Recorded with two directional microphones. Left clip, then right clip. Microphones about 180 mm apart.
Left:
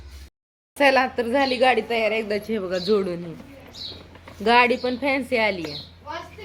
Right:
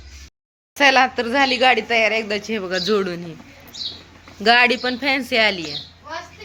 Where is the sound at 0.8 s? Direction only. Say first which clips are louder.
Right 4 dB; 5° right (ahead or behind).